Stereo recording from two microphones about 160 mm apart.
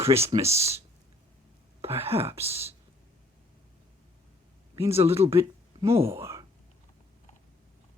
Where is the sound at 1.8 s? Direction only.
15° right (ahead or behind).